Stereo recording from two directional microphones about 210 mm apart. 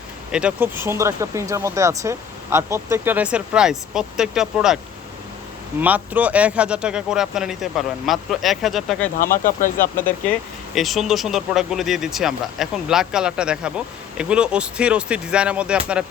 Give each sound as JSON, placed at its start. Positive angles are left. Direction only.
{"t": 0.3, "sound": "speech", "side_deg": -5}
{"t": 5.8, "sound": "speech", "side_deg": -5}
{"t": 9.4, "sound": "speech", "side_deg": 40}
{"t": 10.8, "sound": "speech", "side_deg": 0}